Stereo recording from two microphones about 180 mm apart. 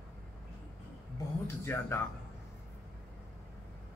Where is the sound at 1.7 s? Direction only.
15° left (ahead or behind).